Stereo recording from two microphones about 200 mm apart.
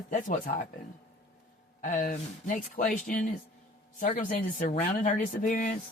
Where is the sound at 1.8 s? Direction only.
40° left (ahead or behind).